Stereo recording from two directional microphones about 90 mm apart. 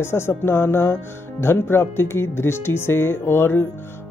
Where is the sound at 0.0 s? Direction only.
25° left (ahead or behind).